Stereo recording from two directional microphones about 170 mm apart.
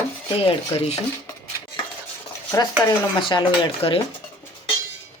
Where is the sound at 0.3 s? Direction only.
35° left (ahead or behind).